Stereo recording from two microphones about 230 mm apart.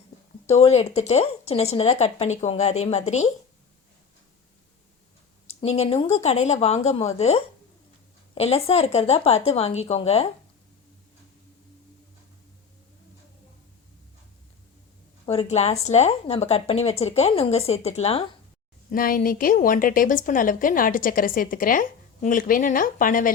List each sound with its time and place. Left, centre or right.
0.4 s speech: left
5.5 s speech: left
15.3 s speech: left
18.9 s a woman's voice: left